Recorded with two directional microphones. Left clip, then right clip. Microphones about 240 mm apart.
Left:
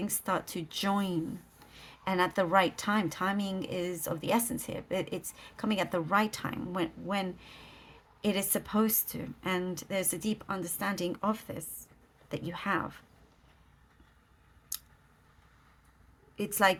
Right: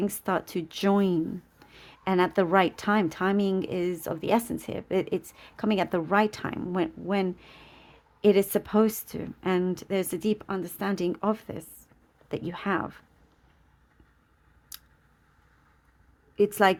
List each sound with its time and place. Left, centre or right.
0.0 s speech: right
16.4 s speech: right